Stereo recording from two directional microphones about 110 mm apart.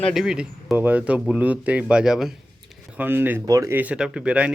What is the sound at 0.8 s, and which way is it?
Speech, 15° right (ahead or behind).